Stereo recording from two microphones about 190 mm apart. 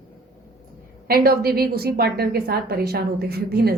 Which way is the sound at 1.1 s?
50° right (ahead or behind).